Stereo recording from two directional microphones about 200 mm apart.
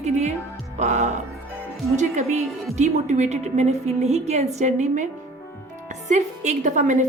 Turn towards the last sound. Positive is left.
turn(degrees=-40)  # may be behind; listen again after turning